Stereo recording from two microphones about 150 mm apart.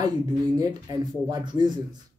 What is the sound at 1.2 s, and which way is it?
Speech, 30° right (ahead or behind).